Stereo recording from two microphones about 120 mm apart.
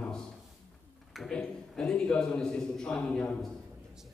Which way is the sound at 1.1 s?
5° left (ahead or behind).